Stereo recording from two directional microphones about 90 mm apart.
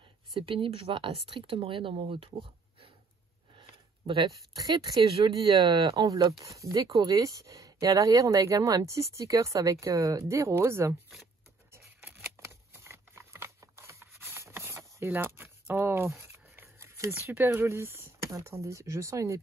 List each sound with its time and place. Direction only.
0.3 s speech: 70° right (ahead or behind); by 2.9 s 90° right
4.6 s speech: 50° right (ahead or behind)
6.0 s speech: 45° right (ahead or behind)
11.7 s scissors: 25° right (ahead or behind)
12.4 s a sound: 30° right (ahead or behind)
17.5 s speech: 30° right (ahead or behind)